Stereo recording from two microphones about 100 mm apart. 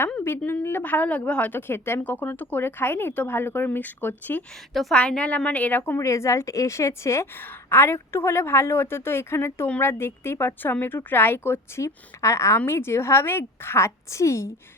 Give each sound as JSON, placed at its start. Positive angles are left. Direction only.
{"t": 0.3, "sound": "a woman's voice", "side_deg": 20}
{"t": 4.7, "sound": "a woman's voice", "side_deg": 0}
{"t": 6.0, "sound": "a woman's voice", "side_deg": 30}